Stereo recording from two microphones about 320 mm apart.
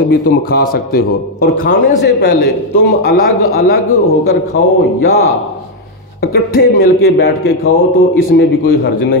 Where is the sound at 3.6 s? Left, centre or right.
Left.